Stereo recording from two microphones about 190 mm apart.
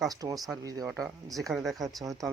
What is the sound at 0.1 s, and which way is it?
Speech, 20° right (ahead or behind).